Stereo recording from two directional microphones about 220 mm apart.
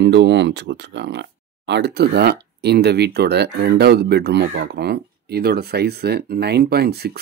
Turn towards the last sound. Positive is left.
turn(degrees=-45)  # may be behind; listen again after turning